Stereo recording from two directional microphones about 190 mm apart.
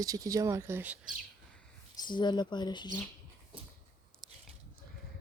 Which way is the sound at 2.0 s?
25° left (ahead or behind).